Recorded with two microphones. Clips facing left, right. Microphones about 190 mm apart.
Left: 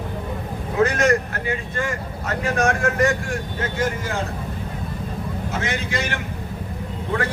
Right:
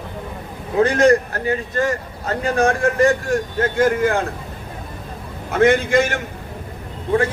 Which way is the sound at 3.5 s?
55° right (ahead or behind).